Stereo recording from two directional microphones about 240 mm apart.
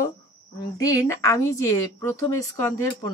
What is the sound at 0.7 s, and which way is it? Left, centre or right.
Speech, centre.